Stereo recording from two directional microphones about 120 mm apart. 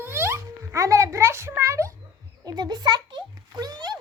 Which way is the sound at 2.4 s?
35° right (ahead or behind).